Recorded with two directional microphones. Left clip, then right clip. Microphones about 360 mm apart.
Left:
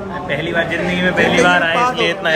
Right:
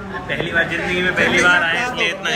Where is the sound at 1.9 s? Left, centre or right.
Left.